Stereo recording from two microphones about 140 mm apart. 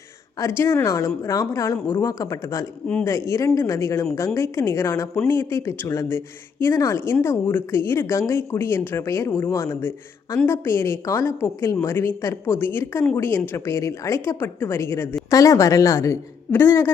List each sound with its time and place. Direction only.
0.3 s speech: 20° left (ahead or behind)